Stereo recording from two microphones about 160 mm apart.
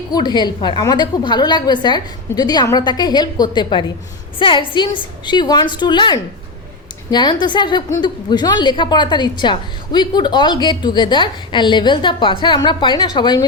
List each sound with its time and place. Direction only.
0.1 s a woman's voice: 25° left (ahead or behind)